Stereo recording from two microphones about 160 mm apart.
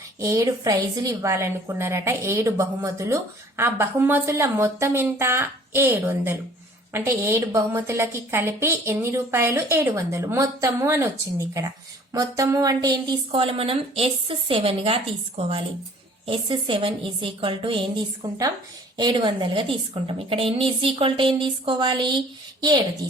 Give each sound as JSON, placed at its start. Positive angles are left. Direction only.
{"t": 0.2, "sound": "a woman's voice", "side_deg": -20}
{"t": 16.2, "sound": "a woman's voice", "side_deg": -30}